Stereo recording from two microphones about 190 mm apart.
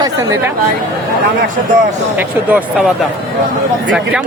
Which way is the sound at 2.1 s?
10° right (ahead or behind).